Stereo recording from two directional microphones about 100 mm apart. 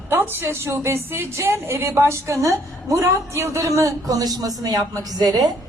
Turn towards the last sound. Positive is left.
turn(degrees=-40)  # may be behind; listen again after turning